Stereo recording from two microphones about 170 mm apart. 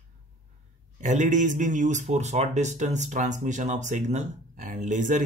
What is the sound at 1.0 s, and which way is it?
Speech, 45° right (ahead or behind).